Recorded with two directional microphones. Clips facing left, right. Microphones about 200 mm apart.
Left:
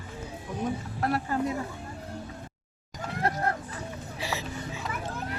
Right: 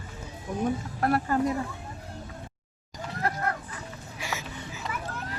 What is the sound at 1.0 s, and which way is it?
Speech, 50° right (ahead or behind).